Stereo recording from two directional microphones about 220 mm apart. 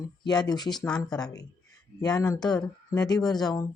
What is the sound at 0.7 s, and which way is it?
Speech, 5° left (ahead or behind).